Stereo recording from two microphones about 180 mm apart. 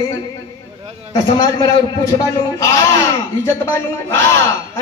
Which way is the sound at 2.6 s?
15° left (ahead or behind).